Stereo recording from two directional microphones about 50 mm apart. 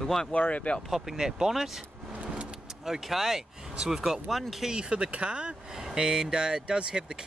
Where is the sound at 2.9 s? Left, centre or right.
Centre.